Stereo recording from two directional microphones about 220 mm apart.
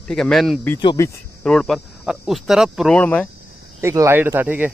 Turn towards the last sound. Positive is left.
turn(degrees=-10)  # may be behind; listen again after turning